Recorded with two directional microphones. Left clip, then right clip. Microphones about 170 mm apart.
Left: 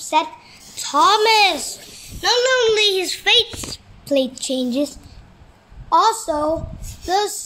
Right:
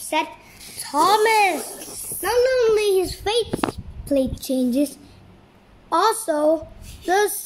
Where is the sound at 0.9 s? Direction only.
15° right (ahead or behind).